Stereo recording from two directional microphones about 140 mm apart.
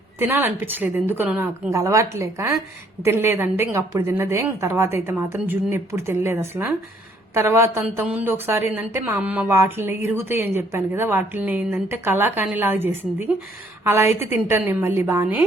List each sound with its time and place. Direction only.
0.2 s a woman's voice: 15° right (ahead or behind)